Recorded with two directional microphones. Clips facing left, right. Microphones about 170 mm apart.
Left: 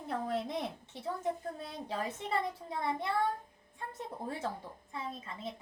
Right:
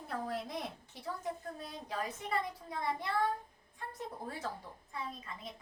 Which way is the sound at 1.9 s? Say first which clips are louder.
Left 2 dB; 25° left (ahead or behind).